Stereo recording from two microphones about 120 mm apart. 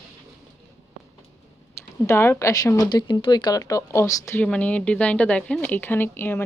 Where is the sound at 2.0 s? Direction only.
20° left (ahead or behind).